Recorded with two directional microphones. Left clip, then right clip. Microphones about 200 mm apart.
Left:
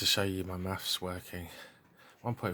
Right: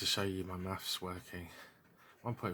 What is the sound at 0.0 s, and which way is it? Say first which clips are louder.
Speech: left 6 dB; 25° left (ahead or behind).